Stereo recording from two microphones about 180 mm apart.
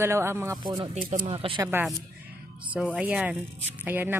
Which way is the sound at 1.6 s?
10° right (ahead or behind).